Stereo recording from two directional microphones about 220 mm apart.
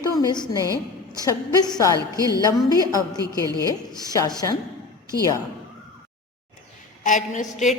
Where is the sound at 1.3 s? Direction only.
15° left (ahead or behind).